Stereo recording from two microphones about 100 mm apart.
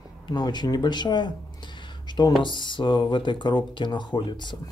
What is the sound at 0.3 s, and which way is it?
Speech, 45° left (ahead or behind).